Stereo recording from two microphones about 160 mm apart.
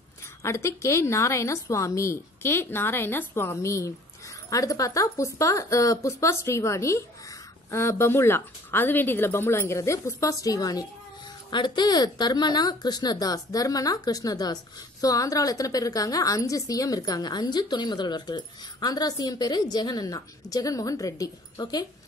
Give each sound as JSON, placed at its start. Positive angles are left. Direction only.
{"t": 0.4, "sound": "a woman's voice", "side_deg": 20}